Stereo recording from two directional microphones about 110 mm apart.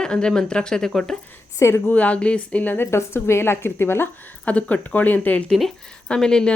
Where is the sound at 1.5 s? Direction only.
25° left (ahead or behind).